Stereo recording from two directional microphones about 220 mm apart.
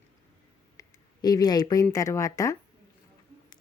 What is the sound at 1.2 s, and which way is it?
Speech, 15° left (ahead or behind).